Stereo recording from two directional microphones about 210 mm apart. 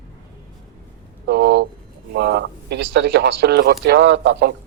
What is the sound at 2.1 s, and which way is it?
A man's voice, 50° right (ahead or behind).